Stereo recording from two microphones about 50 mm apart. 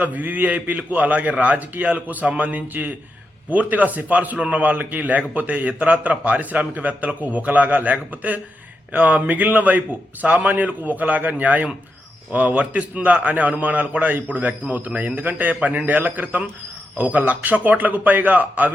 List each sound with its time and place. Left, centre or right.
0.0 s a man's voice: right